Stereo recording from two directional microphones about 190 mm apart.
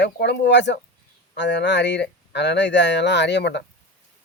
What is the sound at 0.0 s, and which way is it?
Speech, 65° left (ahead or behind).